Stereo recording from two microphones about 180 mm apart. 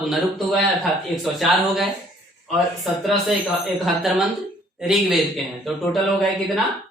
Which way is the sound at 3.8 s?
Centre (ahead or behind).